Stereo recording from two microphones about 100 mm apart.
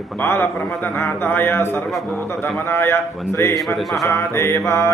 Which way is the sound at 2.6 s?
20° left (ahead or behind).